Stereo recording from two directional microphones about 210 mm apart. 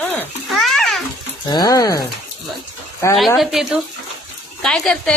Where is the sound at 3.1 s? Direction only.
Centre (ahead or behind).